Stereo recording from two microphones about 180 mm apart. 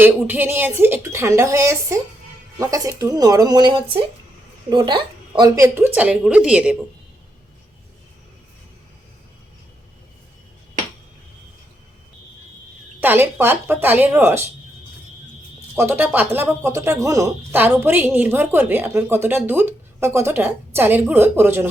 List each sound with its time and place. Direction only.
0.0 s speech: 10° right (ahead or behind)
13.0 s speech: 10° right (ahead or behind)
15.7 s speech: 10° right (ahead or behind)